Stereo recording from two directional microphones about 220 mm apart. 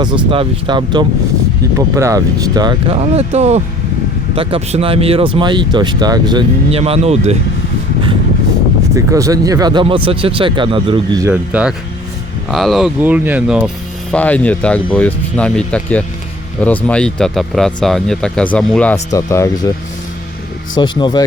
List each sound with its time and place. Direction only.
0.0 s speech: 20° right (ahead or behind)
9.0 s speech: 15° right (ahead or behind)
14.1 s speech: 5° left (ahead or behind)
21.0 s speech: 20° left (ahead or behind)